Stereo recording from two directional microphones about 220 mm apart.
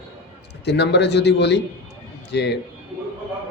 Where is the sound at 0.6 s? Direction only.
50° left (ahead or behind).